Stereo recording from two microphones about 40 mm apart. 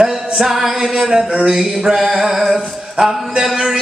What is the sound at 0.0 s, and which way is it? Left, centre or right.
Music, centre.